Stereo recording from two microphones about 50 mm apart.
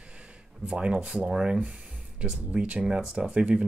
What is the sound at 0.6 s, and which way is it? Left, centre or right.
Speech, centre.